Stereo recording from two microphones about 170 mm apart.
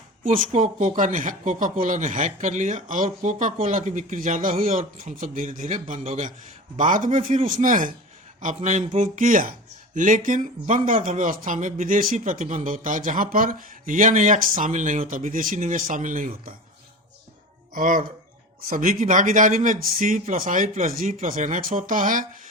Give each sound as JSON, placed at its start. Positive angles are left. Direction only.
{"t": 0.2, "sound": "speech", "side_deg": -50}
{"t": 17.7, "sound": "speech", "side_deg": -55}